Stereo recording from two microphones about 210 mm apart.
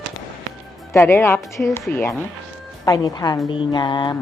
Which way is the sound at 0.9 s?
10° left (ahead or behind).